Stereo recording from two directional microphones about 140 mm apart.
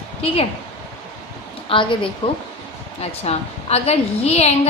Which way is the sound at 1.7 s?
35° left (ahead or behind).